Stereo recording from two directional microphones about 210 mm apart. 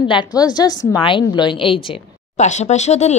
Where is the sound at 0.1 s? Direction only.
20° left (ahead or behind).